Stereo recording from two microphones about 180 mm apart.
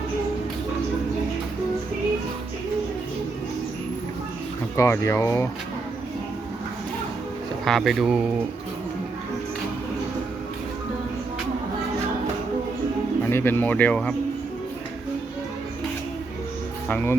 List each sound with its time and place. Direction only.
4.8 s speech: 15° left (ahead or behind)
7.6 s speech: centre (ahead or behind)
13.3 s speech: 10° left (ahead or behind)
16.9 s speech: 10° left (ahead or behind)